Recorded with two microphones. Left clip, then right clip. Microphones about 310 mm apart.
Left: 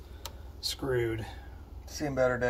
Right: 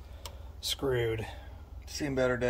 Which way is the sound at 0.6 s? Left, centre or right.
Right.